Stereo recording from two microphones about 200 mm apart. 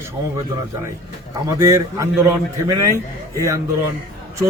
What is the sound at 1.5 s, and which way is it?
A man's voice, 15° right (ahead or behind).